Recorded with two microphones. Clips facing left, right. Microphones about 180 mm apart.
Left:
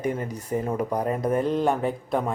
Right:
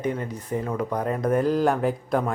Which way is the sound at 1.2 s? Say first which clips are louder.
Right 3 dB; centre (ahead or behind).